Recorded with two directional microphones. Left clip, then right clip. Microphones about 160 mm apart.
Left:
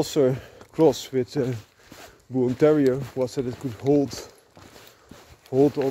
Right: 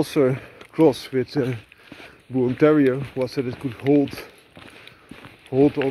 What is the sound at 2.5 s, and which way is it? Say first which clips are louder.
Speech: right 2 dB; 30° left (ahead or behind).